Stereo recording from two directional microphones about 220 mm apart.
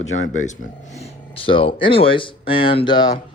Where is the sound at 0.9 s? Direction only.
25° left (ahead or behind).